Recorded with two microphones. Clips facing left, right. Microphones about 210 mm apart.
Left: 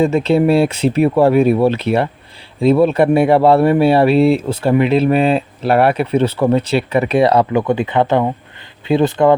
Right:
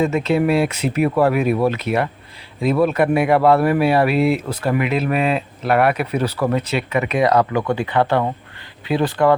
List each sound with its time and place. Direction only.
0.0 s speech: 30° left (ahead or behind)